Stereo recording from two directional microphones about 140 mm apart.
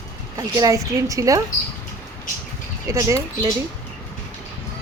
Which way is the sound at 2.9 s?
20° right (ahead or behind).